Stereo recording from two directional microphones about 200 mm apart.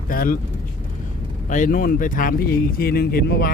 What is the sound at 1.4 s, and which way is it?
Speech, 40° left (ahead or behind).